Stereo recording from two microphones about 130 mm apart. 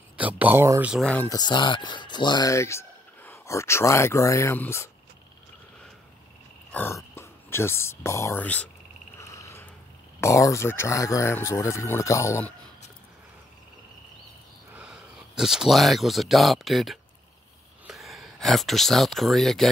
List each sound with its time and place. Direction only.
0.2 s a sound: 10° right (ahead or behind)
0.7 s speech: 10° right (ahead or behind)
1.0 s speech: 10° left (ahead or behind)
1.3 s speech: 35° left (ahead or behind)
6.7 s a sound: 15° left (ahead or behind)
7.0 s speech: 20° left (ahead or behind)
9.2 s frog: 25° left (ahead or behind)
10.2 s speech: 25° left (ahead or behind)
14.7 s speech: 10° right (ahead or behind)